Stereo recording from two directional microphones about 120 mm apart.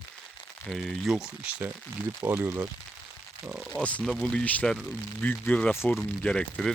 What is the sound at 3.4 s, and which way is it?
Speech, 10° right (ahead or behind).